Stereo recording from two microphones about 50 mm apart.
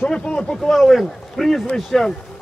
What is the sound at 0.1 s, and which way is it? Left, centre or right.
Speech, centre.